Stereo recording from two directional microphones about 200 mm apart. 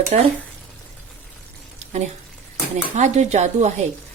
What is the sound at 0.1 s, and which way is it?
Speech, 35° right (ahead or behind).